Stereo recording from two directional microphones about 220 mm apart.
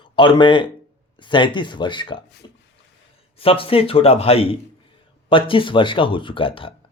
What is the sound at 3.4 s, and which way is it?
Speech, 25° left (ahead or behind).